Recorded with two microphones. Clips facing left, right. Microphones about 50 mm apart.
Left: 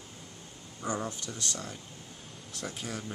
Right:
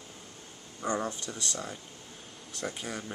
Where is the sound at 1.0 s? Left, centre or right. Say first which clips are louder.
Right 2 dB; centre.